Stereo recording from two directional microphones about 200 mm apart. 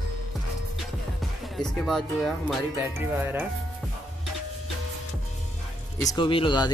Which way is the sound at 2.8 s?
10° right (ahead or behind).